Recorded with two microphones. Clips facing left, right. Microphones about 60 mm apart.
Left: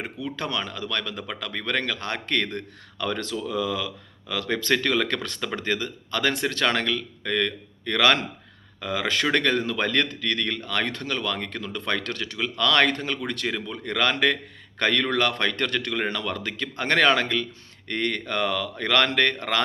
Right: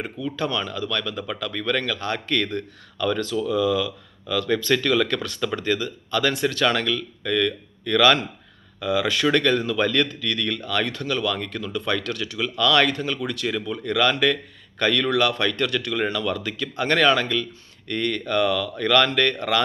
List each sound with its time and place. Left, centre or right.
0.3 s speech: left
4.3 s speech: left
13.5 s speech: left
15.9 s speech: left